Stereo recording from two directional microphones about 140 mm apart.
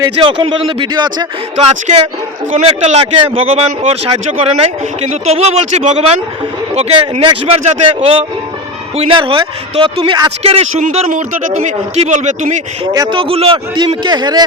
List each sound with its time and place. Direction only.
0.0 s speech: 35° right (ahead or behind)
1.5 s speech: 45° right (ahead or behind)
9.0 s speech: 40° right (ahead or behind)
11.1 s speech: 65° right (ahead or behind)
12.8 s speech: 30° right (ahead or behind)
13.7 s speech: 30° right (ahead or behind)